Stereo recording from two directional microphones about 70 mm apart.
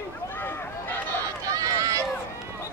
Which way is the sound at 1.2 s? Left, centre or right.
Right.